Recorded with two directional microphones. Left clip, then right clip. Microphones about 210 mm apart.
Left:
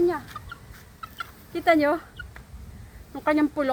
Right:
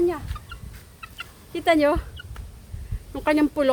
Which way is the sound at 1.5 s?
40° right (ahead or behind).